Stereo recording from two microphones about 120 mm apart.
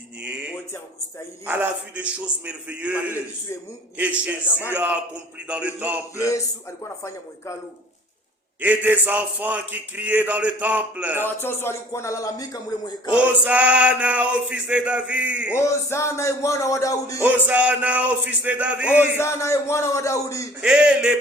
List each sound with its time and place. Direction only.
0.2 s music: 10° right (ahead or behind)
1.5 s a man's voice: 15° right (ahead or behind)
6.8 s speech: 25° left (ahead or behind)
8.6 s a man's voice: 15° right (ahead or behind)
11.2 s speech: 20° left (ahead or behind)
13.1 s a man's voice: 10° right (ahead or behind)
15.5 s speech: 20° left (ahead or behind)
17.2 s a man's voice: 15° right (ahead or behind)
18.9 s speech: 20° left (ahead or behind)
20.6 s a man's voice: 10° right (ahead or behind)